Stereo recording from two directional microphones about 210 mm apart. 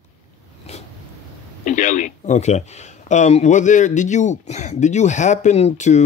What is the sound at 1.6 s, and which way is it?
Speech, 35° left (ahead or behind).